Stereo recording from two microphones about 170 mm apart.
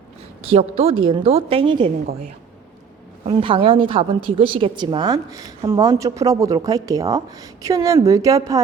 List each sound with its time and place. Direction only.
0.4 s a woman's voice: 35° right (ahead or behind)
3.2 s a woman's voice: 30° right (ahead or behind)